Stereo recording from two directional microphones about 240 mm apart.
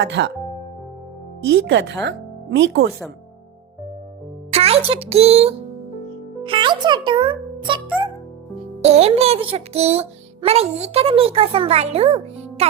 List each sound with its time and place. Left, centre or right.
0.0 s speech: right
1.6 s speech: right
4.5 s a child's voice: right
8.8 s speech: right